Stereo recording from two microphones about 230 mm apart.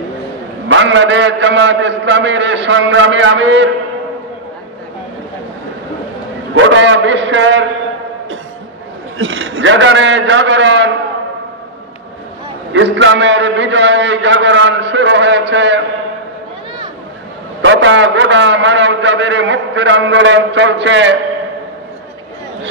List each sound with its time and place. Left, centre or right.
0.7 s a man's voice: right
6.5 s a man's voice: right
9.2 s a man's voice: right
12.7 s a man's voice: right
17.6 s a man's voice: right